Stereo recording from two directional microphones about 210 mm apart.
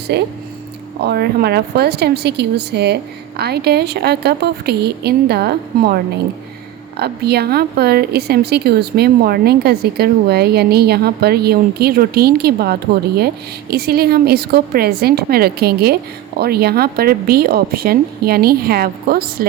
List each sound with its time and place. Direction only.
0.1 s speech: 50° right (ahead or behind)